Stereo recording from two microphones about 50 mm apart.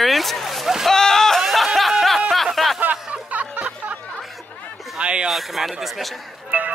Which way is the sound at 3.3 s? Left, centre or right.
Right.